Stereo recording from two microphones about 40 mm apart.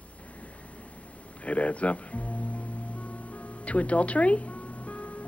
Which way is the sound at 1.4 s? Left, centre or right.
Left.